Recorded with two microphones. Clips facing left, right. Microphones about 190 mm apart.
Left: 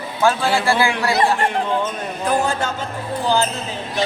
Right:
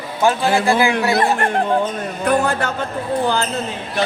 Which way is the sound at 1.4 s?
50° right (ahead or behind).